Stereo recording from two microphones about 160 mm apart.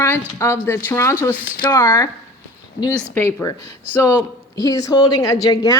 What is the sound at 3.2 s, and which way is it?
Speech, 15° left (ahead or behind).